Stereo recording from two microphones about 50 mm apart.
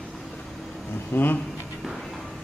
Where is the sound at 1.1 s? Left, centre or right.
Left.